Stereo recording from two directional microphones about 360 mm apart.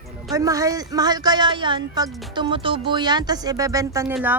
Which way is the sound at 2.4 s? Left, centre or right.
Centre.